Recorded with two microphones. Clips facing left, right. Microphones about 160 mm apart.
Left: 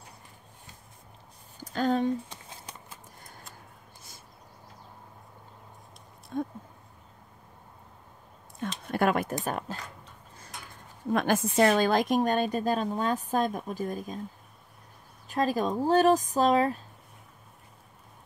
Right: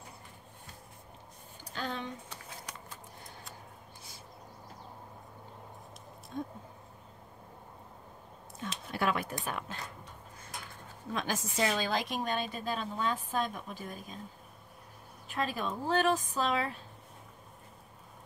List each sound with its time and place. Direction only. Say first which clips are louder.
1.6 s speech: left 12 dB; 45° left (ahead or behind)
8.5 s a sound: left 7 dB; 50° left (ahead or behind)
11.1 s a woman's voice: left 10 dB; 55° left (ahead or behind)
15.2 s speech: left 8 dB; 40° left (ahead or behind)